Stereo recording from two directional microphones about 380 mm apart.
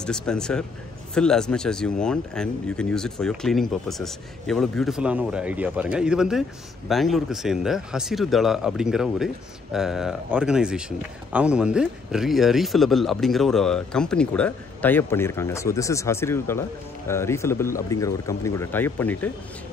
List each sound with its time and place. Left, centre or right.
0.0 s speech: centre